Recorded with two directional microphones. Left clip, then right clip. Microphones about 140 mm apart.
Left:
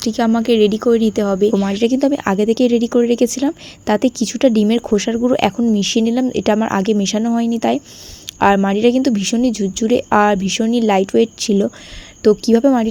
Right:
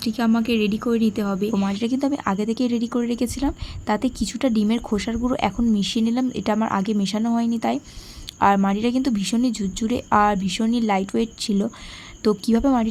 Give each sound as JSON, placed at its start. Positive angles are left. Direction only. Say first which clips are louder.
{"t": 0.0, "sound": "speech", "louder": "left 6 dB", "side_deg": 40}